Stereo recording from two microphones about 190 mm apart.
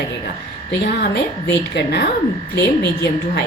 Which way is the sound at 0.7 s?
60° left (ahead or behind).